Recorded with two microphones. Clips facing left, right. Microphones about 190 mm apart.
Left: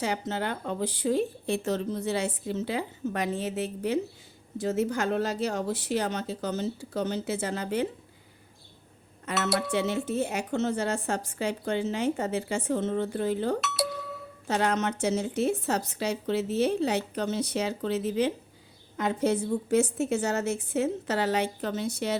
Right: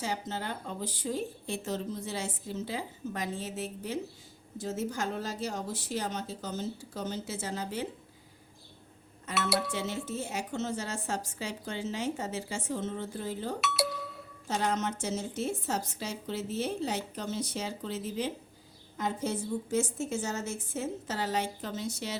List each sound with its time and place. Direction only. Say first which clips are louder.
0.0 s speech: left 5 dB; 70° left (ahead or behind)
9.6 s speech: left 6 dB; 65° left (ahead or behind)